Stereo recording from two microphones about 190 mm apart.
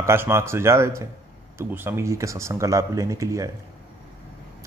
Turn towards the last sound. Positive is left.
turn(degrees=-15)  # may be behind; listen again after turning